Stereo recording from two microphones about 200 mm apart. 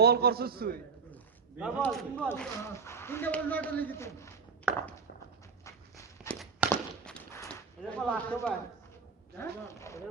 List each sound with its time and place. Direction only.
0.0 s a man's voice: 50° right (ahead or behind)
1.8 s a man's voice: 5° left (ahead or behind)
4.7 s walk: 5° right (ahead or behind)
5.6 s dog: 15° left (ahead or behind)
6.7 s walk: 5° left (ahead or behind)
7.4 s a sound: 5° left (ahead or behind)
9.4 s a man's voice: 15° left (ahead or behind)